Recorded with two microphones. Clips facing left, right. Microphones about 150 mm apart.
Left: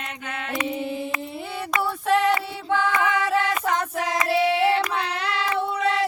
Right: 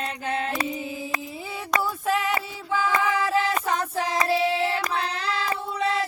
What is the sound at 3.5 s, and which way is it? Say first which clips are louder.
Music: left 1 dB; 30° right (ahead or behind).